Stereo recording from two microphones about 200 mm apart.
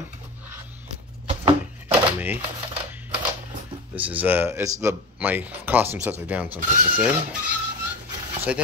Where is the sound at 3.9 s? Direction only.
10° right (ahead or behind).